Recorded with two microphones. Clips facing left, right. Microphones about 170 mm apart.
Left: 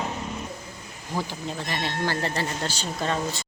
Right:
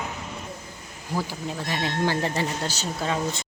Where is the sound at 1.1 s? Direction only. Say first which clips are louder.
Right 1 dB; 10° right (ahead or behind).